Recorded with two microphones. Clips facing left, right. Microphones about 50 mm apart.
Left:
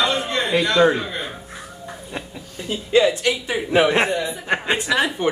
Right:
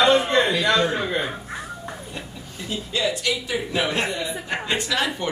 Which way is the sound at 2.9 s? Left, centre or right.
Left.